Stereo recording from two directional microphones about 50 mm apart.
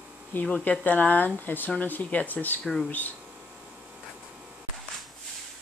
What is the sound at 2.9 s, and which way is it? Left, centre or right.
Speech, left.